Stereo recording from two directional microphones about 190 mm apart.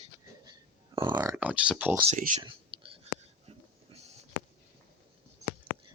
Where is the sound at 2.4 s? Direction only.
30° right (ahead or behind).